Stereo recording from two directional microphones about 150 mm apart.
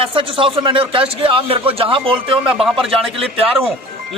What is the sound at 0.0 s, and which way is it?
Speech, 35° right (ahead or behind).